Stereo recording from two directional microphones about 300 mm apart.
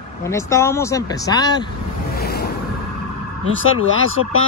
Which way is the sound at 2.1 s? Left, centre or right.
Left.